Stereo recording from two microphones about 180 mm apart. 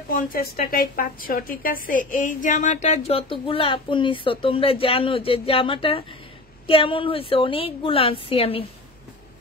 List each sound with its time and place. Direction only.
0.1 s a woman's voice: 50° left (ahead or behind); by 8.6 s 30° left (ahead or behind)